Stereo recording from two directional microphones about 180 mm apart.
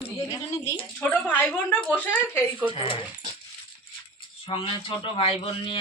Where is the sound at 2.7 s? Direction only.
30° left (ahead or behind).